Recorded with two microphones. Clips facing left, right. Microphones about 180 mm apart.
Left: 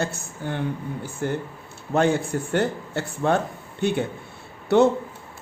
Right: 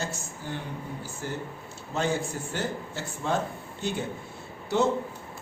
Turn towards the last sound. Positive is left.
turn(degrees=65)  # may be behind; listen again after turning